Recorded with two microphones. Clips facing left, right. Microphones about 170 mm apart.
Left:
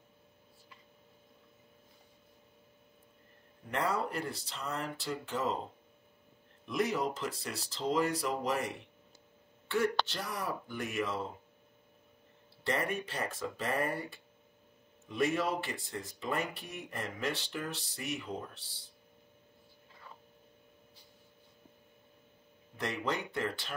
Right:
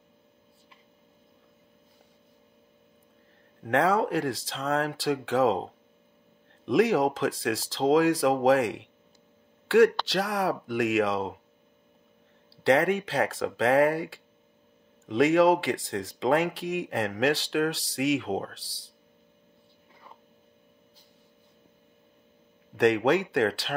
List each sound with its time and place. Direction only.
3.6 s speech: 90° right
6.6 s speech: 90° right
12.6 s speech: 90° right
22.8 s speech: 80° right